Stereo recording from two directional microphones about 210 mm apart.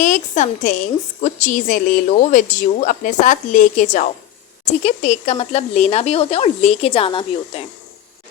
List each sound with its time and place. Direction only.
0.0 s speech: 35° left (ahead or behind)